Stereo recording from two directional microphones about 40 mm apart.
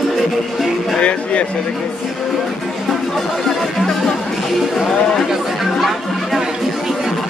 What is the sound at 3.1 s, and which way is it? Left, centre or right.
Speech, centre.